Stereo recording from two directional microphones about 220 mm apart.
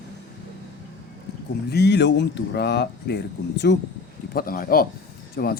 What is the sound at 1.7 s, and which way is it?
Speech, 50° left (ahead or behind).